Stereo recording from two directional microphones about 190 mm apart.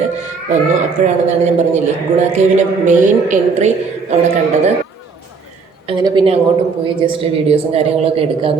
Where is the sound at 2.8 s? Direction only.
40° right (ahead or behind).